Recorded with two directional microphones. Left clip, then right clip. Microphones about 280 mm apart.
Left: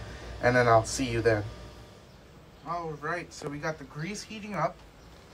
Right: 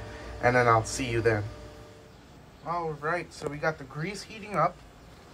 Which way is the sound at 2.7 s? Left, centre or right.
Centre.